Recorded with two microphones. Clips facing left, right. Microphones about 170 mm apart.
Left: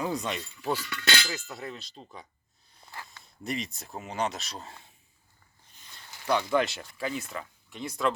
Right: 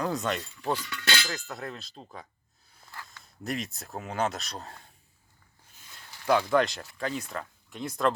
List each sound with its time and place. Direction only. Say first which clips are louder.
0.0 s speech: right 2 dB; centre (ahead or behind)
3.2 s speech: right 1 dB; centre (ahead or behind)
6.3 s speech: right 2 dB; centre (ahead or behind)